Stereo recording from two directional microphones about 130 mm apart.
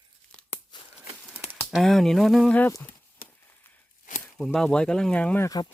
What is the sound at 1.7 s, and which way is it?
Speech, centre (ahead or behind).